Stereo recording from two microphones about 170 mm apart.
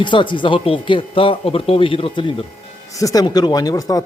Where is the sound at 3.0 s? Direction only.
20° left (ahead or behind).